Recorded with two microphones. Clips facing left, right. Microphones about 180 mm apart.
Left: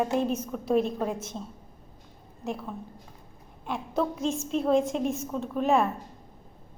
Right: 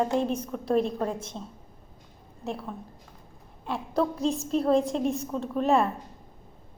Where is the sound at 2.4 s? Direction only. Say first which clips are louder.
Even; centre (ahead or behind).